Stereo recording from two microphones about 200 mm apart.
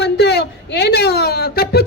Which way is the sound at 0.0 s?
55° left (ahead or behind).